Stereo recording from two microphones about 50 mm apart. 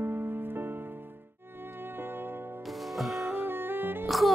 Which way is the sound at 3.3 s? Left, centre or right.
Right.